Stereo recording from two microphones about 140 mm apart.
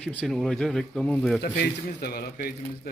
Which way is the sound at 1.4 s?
90° left.